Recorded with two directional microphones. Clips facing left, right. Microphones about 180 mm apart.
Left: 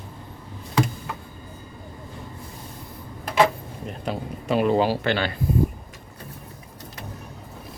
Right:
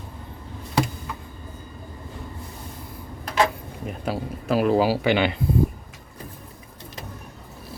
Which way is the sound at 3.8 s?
5° right (ahead or behind).